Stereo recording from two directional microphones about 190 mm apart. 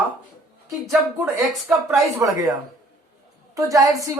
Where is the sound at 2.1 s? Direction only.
15° right (ahead or behind).